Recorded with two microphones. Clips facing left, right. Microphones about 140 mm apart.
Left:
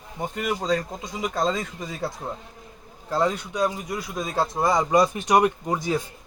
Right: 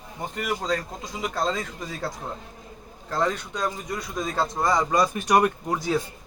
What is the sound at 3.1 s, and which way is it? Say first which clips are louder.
A man's voice: left 2 dB; 10° left (ahead or behind).